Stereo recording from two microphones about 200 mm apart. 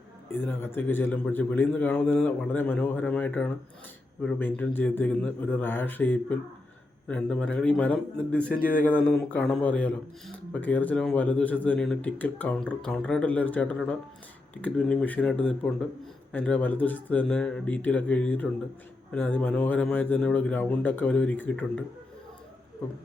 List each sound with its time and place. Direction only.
0.3 s a man's voice: 10° left (ahead or behind)
8.5 s speech: 45° left (ahead or behind)
9.0 s a man's voice: 5° left (ahead or behind)